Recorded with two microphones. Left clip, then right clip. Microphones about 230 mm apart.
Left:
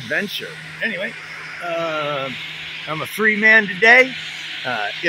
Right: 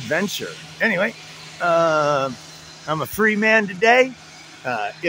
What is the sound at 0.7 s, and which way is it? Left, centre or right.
Speech, right.